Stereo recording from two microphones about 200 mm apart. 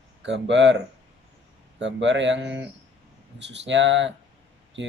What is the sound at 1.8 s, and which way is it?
Speech, 65° right (ahead or behind).